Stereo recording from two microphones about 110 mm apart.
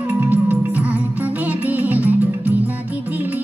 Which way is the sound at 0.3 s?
15° right (ahead or behind).